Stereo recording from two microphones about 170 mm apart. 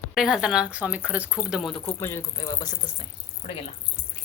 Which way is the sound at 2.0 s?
15° left (ahead or behind).